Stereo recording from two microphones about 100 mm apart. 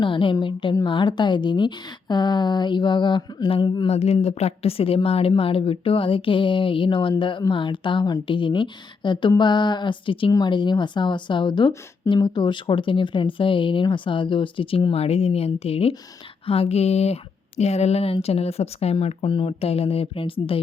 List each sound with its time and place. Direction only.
0.0 s a woman's voice: 55° left (ahead or behind)
3.8 s a woman's voice: 90° left; by 10.3 s 60° left (ahead or behind)
10.3 s a woman's voice: 50° left (ahead or behind)
14.9 s speech: 90° left; by 20.6 s 65° left (ahead or behind)